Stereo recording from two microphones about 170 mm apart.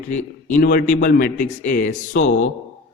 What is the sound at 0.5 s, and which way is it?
Speech, 55° left (ahead or behind).